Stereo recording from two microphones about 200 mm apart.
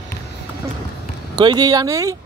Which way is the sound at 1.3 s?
20° right (ahead or behind).